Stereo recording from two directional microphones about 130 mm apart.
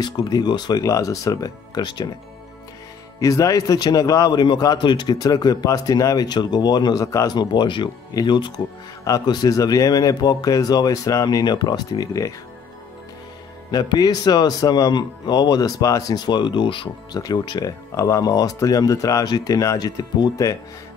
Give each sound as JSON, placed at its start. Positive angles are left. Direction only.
{"t": 0.0, "sound": "speech", "side_deg": 35}
{"t": 3.2, "sound": "a man's voice", "side_deg": 25}
{"t": 13.7, "sound": "a man's voice", "side_deg": 30}